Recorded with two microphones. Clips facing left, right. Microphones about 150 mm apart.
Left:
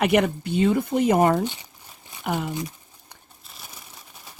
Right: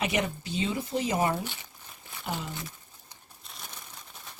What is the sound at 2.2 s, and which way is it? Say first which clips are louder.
Speech: left 8 dB; 60° left (ahead or behind).